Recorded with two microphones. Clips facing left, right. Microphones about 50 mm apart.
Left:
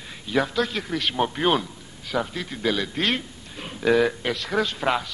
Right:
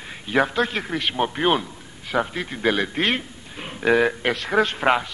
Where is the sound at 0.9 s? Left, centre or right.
Centre.